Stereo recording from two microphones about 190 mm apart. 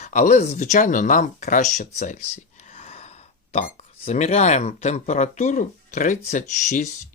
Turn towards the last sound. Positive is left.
turn(degrees=40)  # may be behind; listen again after turning